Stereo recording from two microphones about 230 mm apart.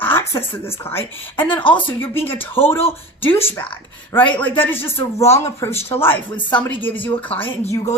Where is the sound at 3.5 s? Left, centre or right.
Centre.